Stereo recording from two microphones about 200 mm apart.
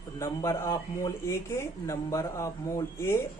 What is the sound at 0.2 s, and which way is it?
A man's voice, 15° left (ahead or behind).